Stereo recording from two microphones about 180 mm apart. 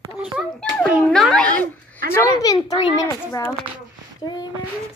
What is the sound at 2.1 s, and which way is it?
A woman's voice, 20° left (ahead or behind).